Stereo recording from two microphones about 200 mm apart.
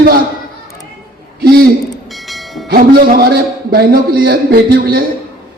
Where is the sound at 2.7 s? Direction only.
50° right (ahead or behind).